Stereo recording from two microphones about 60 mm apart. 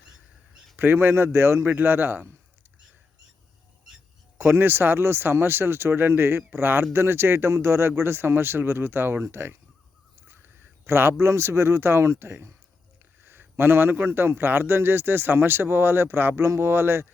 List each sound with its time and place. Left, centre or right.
0.8 s a man's voice: right
4.4 s a man's voice: right
10.2 s crow: right
10.8 s speech: right
13.2 s a man's voice: right